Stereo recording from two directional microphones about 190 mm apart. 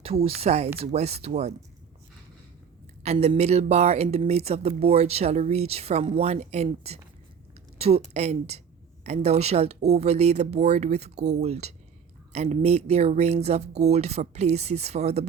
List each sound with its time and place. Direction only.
0.0 s speech: 30° right (ahead or behind)
3.0 s speech: 35° right (ahead or behind)